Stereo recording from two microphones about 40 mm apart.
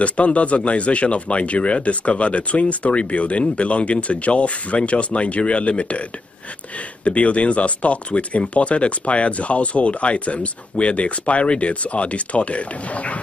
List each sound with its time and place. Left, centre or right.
0.0 s speech: left
7.1 s speech: left